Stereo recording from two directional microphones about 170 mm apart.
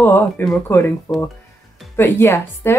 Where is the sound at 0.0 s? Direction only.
10° left (ahead or behind).